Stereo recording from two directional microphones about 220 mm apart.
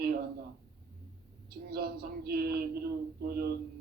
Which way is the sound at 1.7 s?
45° right (ahead or behind).